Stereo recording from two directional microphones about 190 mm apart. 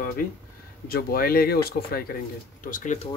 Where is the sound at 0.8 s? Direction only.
50° left (ahead or behind).